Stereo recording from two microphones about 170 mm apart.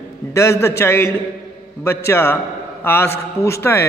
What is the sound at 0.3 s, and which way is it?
A man's voice, 15° left (ahead or behind).